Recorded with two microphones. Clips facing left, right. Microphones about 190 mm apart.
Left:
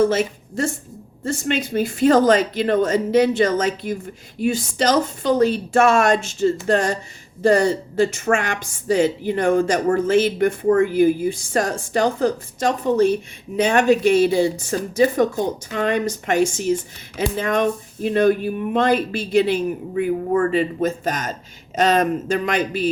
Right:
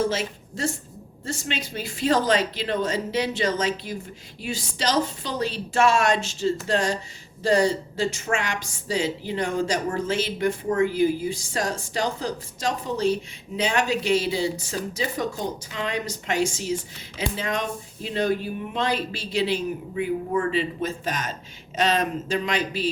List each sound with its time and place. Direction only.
0.0 s a woman's voice: 50° left (ahead or behind)